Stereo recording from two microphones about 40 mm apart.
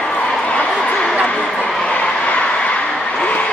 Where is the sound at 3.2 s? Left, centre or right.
Left.